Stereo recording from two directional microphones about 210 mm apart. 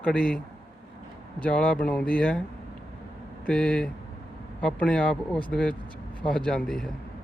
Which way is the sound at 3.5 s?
5° left (ahead or behind).